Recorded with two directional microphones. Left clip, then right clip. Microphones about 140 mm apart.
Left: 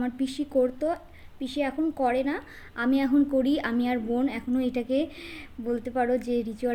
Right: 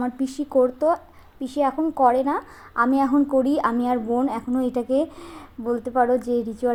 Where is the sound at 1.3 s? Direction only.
Centre (ahead or behind).